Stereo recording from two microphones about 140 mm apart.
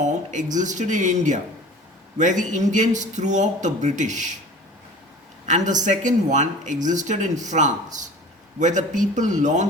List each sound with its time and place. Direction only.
0.0 s a sound: 60° right (ahead or behind)
0.5 s speech: 60° right (ahead or behind)
5.5 s speech: 60° right (ahead or behind)